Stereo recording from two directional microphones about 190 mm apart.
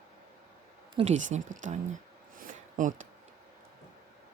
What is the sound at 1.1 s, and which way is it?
Speech, 40° right (ahead or behind).